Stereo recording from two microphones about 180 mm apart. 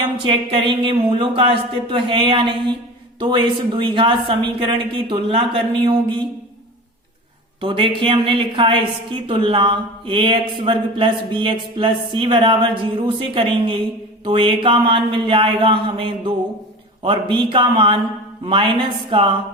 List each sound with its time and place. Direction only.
0.0 s a woman's voice: 30° right (ahead or behind)
7.6 s a woman's voice: 30° right (ahead or behind)